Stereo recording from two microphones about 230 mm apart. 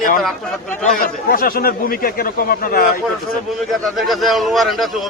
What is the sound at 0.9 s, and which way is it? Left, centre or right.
Speech, left.